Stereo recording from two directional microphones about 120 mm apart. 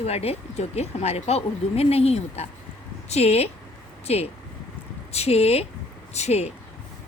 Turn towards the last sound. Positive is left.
turn(degrees=65)  # may be behind; listen again after turning